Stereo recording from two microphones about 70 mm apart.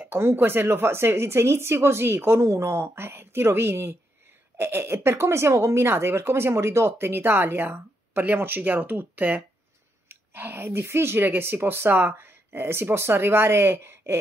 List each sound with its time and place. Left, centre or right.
0.0 s speech: right